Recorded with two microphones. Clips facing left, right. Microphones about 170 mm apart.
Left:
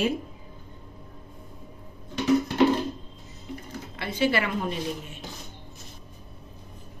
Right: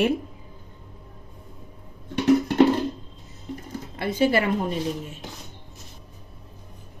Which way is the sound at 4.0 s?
45° right (ahead or behind).